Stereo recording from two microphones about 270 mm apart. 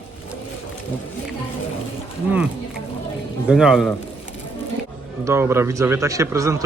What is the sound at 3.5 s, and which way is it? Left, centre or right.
Speech, centre.